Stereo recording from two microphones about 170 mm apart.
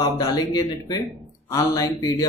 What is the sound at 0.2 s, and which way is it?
Speech, 25° left (ahead or behind).